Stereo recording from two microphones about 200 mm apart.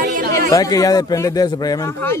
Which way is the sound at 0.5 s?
15° left (ahead or behind).